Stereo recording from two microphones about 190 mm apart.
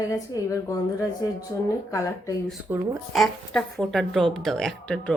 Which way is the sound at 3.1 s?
Centre (ahead or behind).